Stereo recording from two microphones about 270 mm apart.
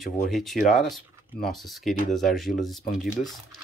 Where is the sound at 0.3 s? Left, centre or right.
Centre.